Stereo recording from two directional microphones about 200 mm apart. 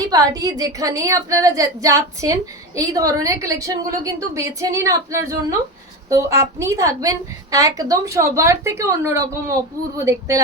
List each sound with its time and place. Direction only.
0.1 s a woman's voice: 20° right (ahead or behind)